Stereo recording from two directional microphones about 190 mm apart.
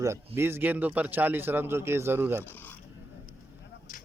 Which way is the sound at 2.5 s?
10° left (ahead or behind).